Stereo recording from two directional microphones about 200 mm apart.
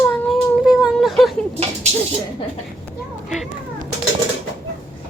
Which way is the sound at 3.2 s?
Centre (ahead or behind).